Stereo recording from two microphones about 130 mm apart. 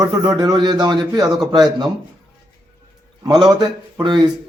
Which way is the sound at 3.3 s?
30° right (ahead or behind).